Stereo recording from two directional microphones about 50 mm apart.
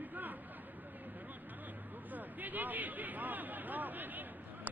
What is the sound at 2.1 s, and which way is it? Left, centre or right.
Speech, right.